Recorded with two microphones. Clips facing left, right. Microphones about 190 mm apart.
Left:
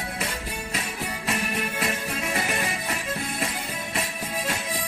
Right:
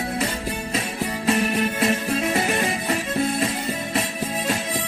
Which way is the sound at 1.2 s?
30° right (ahead or behind).